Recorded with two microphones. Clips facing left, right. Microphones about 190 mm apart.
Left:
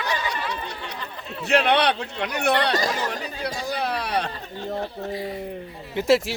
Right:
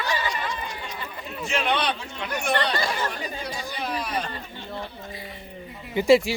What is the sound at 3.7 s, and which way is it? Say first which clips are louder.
Speech: left 3 dB; 65° left (ahead or behind).